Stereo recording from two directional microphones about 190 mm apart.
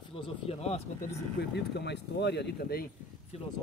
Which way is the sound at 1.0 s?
60° left (ahead or behind).